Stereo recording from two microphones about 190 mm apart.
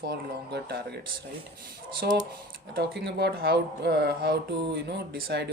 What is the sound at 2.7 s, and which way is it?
Speech, 60° right (ahead or behind).